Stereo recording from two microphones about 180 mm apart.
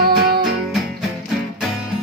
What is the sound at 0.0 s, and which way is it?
Music, 55° right (ahead or behind).